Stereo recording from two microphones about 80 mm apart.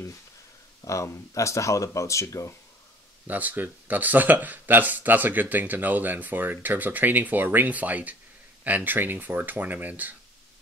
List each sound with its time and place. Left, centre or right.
0.8 s speech: left
3.3 s speech: right